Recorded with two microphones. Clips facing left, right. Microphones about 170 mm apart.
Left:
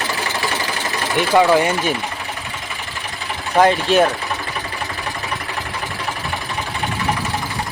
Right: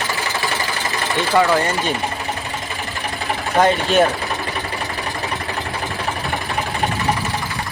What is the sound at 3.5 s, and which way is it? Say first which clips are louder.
Speech: left 1 dB; centre (ahead or behind).